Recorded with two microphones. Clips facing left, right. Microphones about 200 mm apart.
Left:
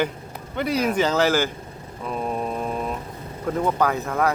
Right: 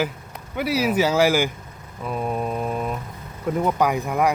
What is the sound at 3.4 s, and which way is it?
Speech, 10° right (ahead or behind).